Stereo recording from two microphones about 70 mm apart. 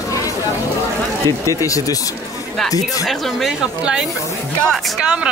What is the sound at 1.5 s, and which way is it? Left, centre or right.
Speech, left.